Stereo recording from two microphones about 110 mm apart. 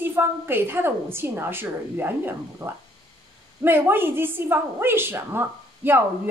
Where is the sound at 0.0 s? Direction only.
20° right (ahead or behind).